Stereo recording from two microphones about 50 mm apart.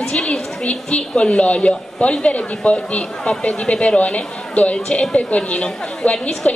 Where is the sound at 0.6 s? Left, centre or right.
Left.